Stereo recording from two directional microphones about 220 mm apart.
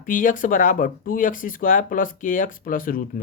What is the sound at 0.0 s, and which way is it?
Speech, 35° left (ahead or behind).